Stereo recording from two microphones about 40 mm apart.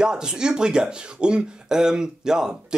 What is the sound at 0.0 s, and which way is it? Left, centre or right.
Speech, centre.